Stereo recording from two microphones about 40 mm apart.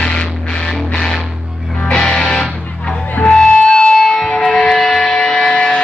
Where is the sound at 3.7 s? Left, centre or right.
Left.